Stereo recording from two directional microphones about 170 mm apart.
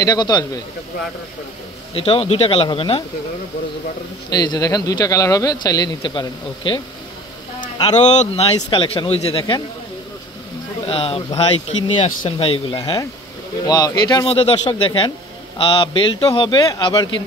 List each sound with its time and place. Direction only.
0.0 s speech: 25° left (ahead or behind)
2.0 s speech: 35° left (ahead or behind)
4.3 s speech: 25° left (ahead or behind)
7.9 s speech: 45° left (ahead or behind)
8.5 s speech: 30° left (ahead or behind)
10.9 s speech: 35° left (ahead or behind)
12.7 s speech: 25° left (ahead or behind)